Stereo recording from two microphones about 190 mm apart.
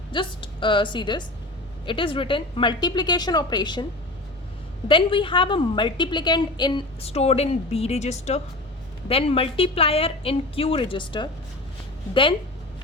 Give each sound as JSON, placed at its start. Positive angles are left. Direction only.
{"t": 0.1, "sound": "a woman's voice", "side_deg": 25}
{"t": 4.9, "sound": "a woman's voice", "side_deg": 25}